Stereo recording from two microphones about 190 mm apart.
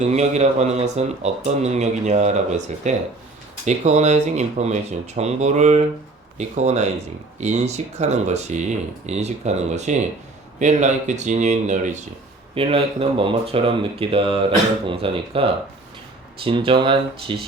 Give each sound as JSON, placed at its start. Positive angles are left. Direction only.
{"t": 0.0, "sound": "speech", "side_deg": -35}